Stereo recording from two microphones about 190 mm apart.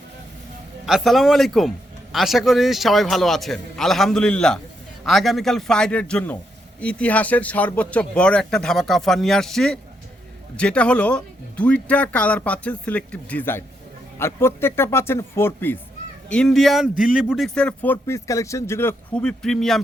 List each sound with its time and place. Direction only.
0.9 s speech: centre (ahead or behind)